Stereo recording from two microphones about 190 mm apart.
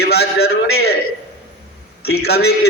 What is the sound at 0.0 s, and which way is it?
Speech, 55° left (ahead or behind).